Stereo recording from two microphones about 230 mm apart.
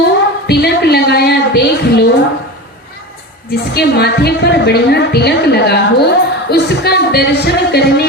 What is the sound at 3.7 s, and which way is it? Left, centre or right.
A woman's voice, left.